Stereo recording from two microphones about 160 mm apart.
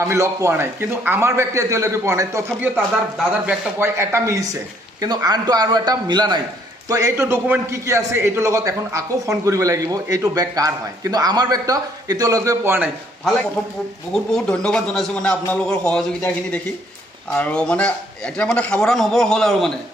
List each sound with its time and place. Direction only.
0.0 s a man's voice: 20° right (ahead or behind)
14.1 s a man's voice: 5° left (ahead or behind)